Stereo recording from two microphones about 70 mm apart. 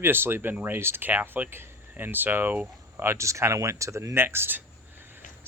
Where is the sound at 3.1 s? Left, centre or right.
Right.